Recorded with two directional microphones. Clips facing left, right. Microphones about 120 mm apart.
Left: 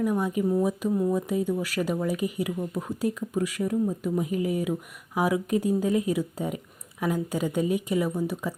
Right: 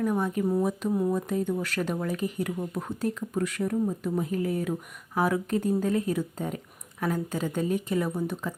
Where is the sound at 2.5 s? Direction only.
5° right (ahead or behind).